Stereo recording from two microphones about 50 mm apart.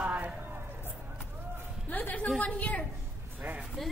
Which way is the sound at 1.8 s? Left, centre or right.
Left.